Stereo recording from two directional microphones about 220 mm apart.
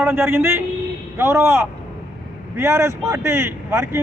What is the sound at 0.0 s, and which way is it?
Speech, 10° right (ahead or behind).